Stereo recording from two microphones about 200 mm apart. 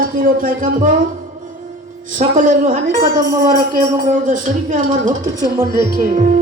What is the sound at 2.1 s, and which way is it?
A woman's voice, 40° right (ahead or behind).